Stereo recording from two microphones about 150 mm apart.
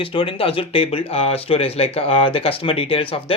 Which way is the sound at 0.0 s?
35° left (ahead or behind).